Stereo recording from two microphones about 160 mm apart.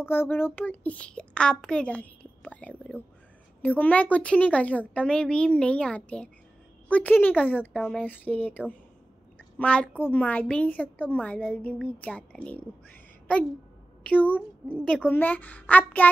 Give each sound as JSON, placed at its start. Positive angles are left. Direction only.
{"t": 0.0, "sound": "a child's voice", "side_deg": 15}